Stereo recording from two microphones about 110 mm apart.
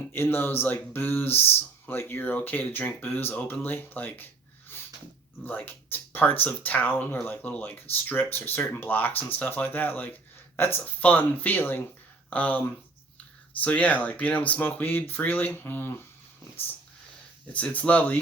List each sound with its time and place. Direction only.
0.1 s speech: 20° left (ahead or behind)
4.7 s snort: 20° left (ahead or behind)
5.4 s speech: 15° left (ahead or behind)
17.4 s speech: 10° left (ahead or behind)